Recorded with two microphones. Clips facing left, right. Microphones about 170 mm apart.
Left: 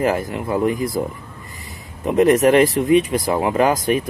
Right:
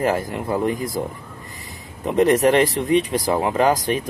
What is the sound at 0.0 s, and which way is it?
Speech, centre (ahead or behind).